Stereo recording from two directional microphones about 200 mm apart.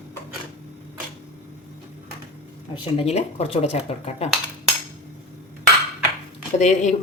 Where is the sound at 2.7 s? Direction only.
25° left (ahead or behind).